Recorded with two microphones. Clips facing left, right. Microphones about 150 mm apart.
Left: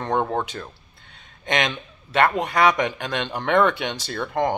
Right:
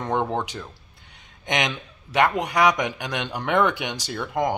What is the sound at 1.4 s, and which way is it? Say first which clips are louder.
Speech: left 2 dB; 15° right (ahead or behind).